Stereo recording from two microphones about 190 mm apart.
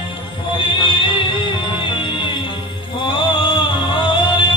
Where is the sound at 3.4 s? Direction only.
25° left (ahead or behind).